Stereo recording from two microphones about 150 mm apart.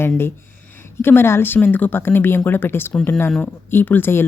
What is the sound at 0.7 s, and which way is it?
Speech, 15° left (ahead or behind).